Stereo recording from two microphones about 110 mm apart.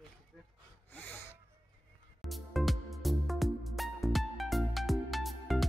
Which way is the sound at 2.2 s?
Centre (ahead or behind).